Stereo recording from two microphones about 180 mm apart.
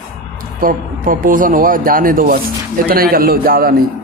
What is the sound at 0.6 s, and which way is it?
A man's voice, 50° right (ahead or behind).